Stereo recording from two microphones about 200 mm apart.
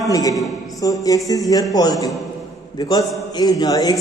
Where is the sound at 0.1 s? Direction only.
15° left (ahead or behind).